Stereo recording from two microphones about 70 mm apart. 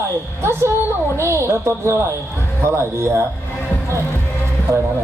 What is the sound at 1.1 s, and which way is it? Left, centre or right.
A woman's voice, right.